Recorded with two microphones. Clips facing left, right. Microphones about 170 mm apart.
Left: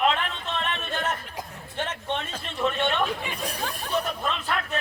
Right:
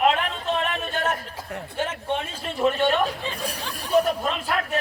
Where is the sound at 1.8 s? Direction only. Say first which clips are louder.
Right 3 dB; 10° right (ahead or behind).